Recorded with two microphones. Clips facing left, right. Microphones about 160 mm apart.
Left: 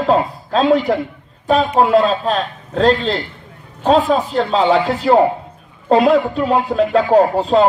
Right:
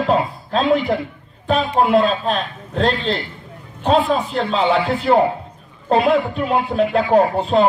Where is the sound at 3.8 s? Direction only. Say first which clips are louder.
Left 3 dB; 40° left (ahead or behind).